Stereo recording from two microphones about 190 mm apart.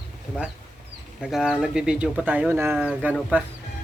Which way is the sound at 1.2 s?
Centre (ahead or behind).